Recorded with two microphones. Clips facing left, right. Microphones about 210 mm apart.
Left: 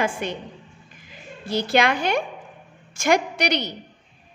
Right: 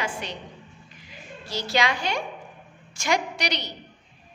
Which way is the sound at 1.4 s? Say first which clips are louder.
Left 5 dB; 55° left (ahead or behind).